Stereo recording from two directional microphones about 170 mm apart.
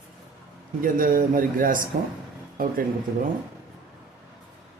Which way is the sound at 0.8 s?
55° right (ahead or behind).